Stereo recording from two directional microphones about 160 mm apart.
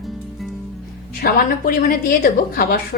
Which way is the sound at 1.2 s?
70° left (ahead or behind).